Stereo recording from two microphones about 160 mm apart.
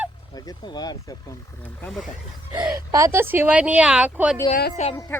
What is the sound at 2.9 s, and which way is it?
A woman's voice, 20° right (ahead or behind).